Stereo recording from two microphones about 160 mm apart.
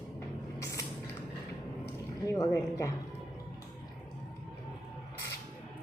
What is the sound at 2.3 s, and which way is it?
Speech, 20° left (ahead or behind).